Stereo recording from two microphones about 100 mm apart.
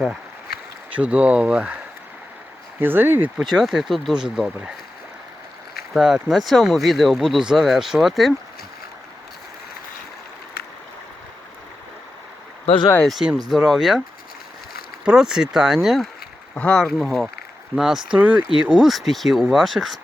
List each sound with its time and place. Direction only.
0.9 s speech: 15° right (ahead or behind)
2.8 s speech: 20° right (ahead or behind)
3.4 s speech: 5° right (ahead or behind)
5.9 s speech: centre (ahead or behind)
13.0 s speech: centre (ahead or behind)
15.0 s speech: 5° right (ahead or behind)
16.6 s speech: 10° left (ahead or behind)
18.2 s speech: 15° right (ahead or behind)